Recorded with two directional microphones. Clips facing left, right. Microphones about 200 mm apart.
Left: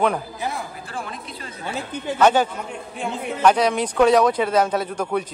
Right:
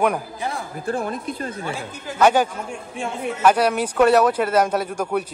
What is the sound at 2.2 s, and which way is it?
Speech, 10° right (ahead or behind).